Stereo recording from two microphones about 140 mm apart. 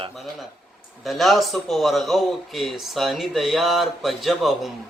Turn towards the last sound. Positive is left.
turn(degrees=0)  # may be behind; listen again after turning